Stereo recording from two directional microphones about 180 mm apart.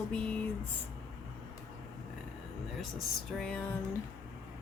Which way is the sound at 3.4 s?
5° left (ahead or behind).